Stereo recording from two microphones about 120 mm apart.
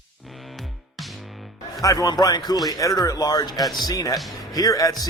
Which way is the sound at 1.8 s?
30° left (ahead or behind).